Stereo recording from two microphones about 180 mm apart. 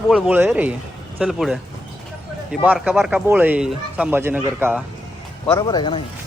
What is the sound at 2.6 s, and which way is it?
Speech, 5° right (ahead or behind).